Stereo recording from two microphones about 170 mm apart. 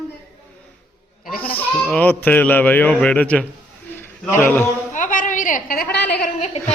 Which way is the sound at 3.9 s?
15° left (ahead or behind).